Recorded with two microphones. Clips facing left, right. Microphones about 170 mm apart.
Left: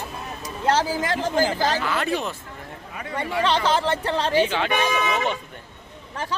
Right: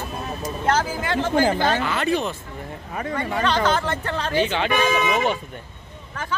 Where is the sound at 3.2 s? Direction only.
30° left (ahead or behind).